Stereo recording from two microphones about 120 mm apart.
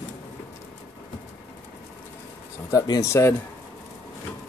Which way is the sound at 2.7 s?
25° left (ahead or behind).